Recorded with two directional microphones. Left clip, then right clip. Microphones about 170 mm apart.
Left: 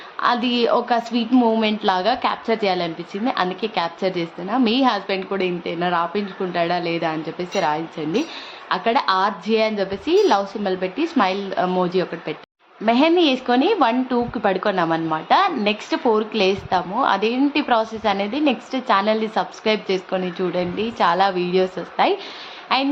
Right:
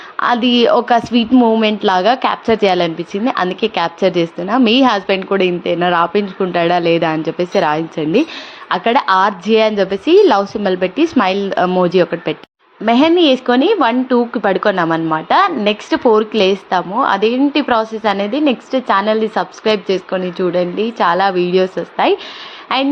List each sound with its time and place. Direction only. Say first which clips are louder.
0.2 s a woman's voice: right 6 dB; 40° right (ahead or behind)
1.4 s a woman's voice: right 5 dB; 25° right (ahead or behind)